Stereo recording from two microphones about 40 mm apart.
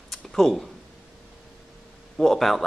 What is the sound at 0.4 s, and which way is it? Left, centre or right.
Speech, centre.